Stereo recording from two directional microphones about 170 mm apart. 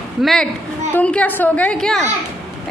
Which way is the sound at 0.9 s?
5° left (ahead or behind).